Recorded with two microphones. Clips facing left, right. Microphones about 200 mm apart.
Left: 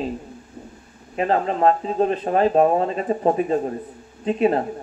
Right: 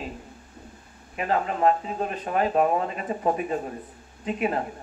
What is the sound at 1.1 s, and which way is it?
Speech, 30° left (ahead or behind).